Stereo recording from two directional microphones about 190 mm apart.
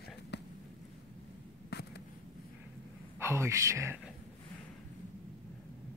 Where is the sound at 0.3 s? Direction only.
65° left (ahead or behind).